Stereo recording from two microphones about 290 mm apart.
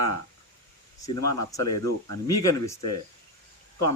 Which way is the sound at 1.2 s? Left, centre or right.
Left.